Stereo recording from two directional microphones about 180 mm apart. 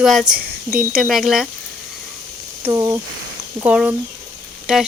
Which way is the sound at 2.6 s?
15° right (ahead or behind).